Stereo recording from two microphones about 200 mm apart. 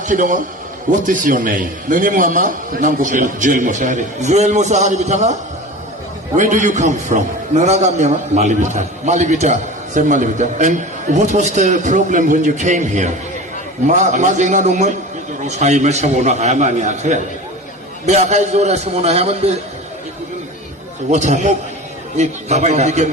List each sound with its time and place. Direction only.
0.0 s a man's voice: 40° right (ahead or behind)
21.1 s a man's voice: 35° right (ahead or behind)